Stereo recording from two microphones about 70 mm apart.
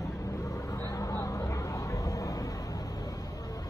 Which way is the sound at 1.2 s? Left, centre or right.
Left.